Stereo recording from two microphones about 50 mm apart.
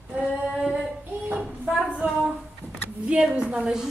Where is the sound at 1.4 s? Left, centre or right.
Centre.